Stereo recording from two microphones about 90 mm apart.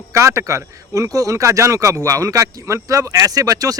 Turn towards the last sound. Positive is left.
turn(degrees=-40)  # may be behind; listen again after turning